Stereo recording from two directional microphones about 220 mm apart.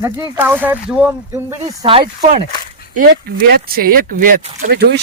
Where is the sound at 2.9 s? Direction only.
40° right (ahead or behind).